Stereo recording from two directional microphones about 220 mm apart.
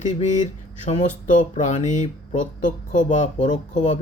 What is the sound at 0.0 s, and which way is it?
Speech, 35° left (ahead or behind).